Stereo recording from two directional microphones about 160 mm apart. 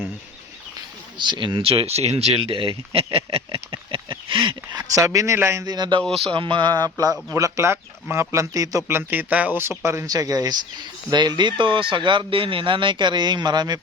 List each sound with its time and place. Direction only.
1.2 s speech: 30° right (ahead or behind)
6.0 s speech: centre (ahead or behind)
6.3 s speech: 30° right (ahead or behind)